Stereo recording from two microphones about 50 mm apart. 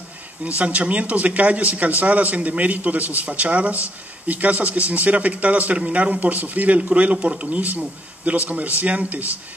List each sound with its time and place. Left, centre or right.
0.6 s a man's voice: right